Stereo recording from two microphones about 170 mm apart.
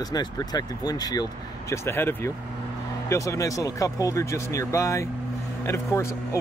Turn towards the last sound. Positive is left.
turn(degrees=15)  # may be behind; listen again after turning